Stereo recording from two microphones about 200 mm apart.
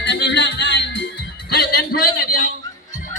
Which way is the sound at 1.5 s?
50° left (ahead or behind).